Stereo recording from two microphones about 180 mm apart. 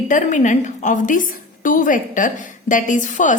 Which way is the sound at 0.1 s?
45° left (ahead or behind).